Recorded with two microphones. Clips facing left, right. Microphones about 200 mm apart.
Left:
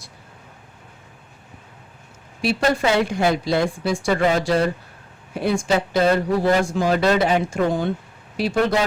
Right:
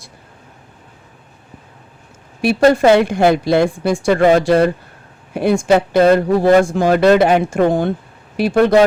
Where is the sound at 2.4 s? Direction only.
55° right (ahead or behind).